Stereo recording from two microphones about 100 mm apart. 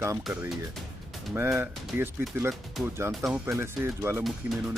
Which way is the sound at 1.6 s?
25° right (ahead or behind).